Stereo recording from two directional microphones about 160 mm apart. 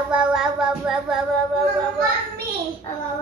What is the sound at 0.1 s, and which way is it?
Child singing, 5° right (ahead or behind).